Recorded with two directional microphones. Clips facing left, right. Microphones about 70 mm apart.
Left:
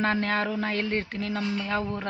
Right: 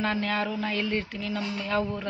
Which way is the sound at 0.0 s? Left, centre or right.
Left.